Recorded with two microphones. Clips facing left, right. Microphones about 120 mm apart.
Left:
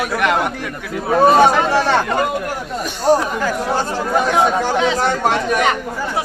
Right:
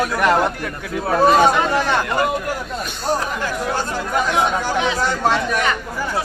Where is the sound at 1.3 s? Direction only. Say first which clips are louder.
Left 2 dB; 30° left (ahead or behind).